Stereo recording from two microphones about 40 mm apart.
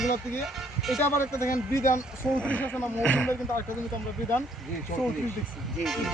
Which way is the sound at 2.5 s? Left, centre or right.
Left.